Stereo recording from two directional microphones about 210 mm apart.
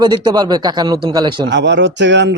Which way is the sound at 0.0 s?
20° right (ahead or behind).